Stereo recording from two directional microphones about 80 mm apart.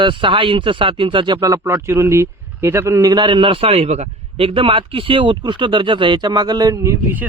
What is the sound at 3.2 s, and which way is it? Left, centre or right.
A man's voice, right.